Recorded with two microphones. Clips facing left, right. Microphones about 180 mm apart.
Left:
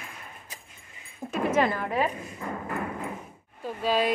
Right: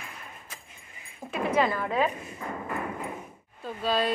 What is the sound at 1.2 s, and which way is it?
Speech, 45° left (ahead or behind).